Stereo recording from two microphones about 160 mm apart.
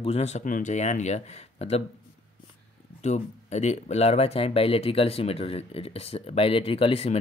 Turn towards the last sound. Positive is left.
turn(degrees=40)  # may be behind; listen again after turning